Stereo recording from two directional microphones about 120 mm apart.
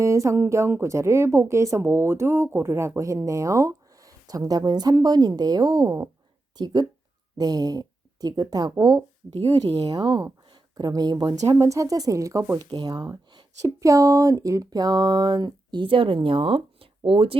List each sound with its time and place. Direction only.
0.0 s a woman's voice: 25° right (ahead or behind)
11.4 s a woman's voice: 25° right (ahead or behind); by 17.3 s 50° right (ahead or behind)